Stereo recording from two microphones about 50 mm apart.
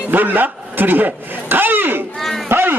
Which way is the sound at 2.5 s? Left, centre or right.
Right.